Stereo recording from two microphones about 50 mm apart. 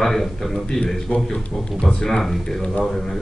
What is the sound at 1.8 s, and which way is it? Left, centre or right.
Speech, centre.